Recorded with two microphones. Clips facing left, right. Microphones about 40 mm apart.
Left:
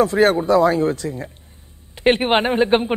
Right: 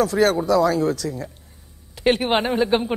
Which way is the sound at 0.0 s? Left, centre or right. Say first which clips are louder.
Left 3 dB; left.